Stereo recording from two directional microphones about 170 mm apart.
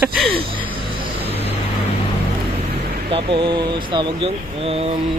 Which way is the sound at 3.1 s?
30° right (ahead or behind).